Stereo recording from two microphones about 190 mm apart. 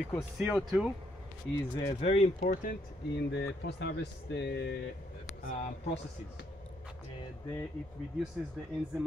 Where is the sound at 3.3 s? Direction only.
65° left (ahead or behind).